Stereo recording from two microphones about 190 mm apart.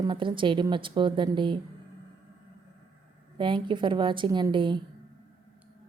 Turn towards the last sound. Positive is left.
turn(degrees=-25)  # may be behind; listen again after turning